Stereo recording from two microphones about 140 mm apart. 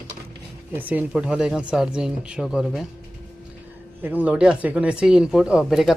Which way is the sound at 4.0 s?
10° right (ahead or behind).